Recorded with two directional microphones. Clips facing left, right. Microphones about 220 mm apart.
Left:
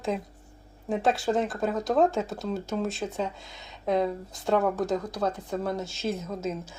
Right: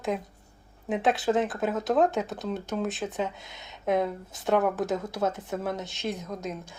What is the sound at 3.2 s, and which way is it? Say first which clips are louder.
Speech: even; 20° right (ahead or behind).